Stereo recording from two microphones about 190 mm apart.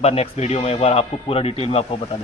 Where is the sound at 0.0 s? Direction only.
35° left (ahead or behind).